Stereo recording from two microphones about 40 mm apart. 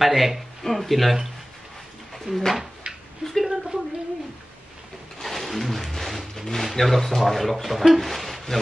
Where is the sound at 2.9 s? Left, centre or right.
Right.